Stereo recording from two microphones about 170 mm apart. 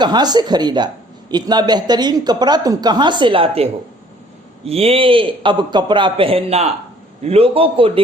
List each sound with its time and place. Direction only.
0.0 s a man's voice: 25° right (ahead or behind)